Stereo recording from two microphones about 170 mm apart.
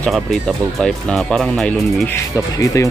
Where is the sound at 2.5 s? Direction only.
20° left (ahead or behind).